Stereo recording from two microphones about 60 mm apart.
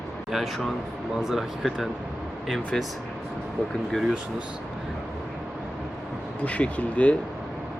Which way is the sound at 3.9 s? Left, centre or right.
Centre.